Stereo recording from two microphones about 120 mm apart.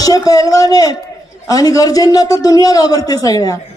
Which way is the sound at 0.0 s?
30° left (ahead or behind).